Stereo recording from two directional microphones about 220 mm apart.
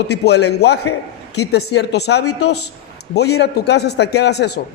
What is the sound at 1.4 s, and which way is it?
Speech, 50° left (ahead or behind).